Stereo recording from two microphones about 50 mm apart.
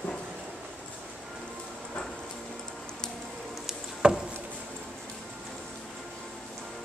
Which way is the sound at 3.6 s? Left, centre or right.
Centre.